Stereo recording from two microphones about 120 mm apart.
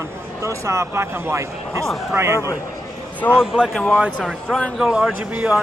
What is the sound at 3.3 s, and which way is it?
Speech, 5° right (ahead or behind).